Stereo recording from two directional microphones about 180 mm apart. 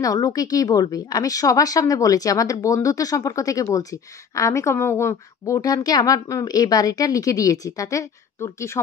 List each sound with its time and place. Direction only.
0.0 s a woman's voice: 20° left (ahead or behind)